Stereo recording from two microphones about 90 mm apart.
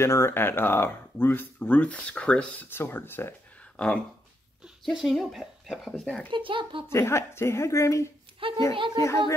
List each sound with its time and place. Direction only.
0.0 s speech: 30° left (ahead or behind); by 2.4 s 10° left (ahead or behind)
2.7 s speech: 25° left (ahead or behind)
3.7 s speech: 15° left (ahead or behind)
4.8 s speech: centre (ahead or behind)
6.3 s a child's voice: 70° right (ahead or behind)
6.9 s speech: 30° left (ahead or behind)
8.4 s a woman's voice: 85° right
8.7 s a child's voice: 65° right (ahead or behind)